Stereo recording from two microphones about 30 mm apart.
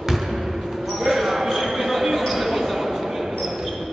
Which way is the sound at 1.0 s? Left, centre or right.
Centre.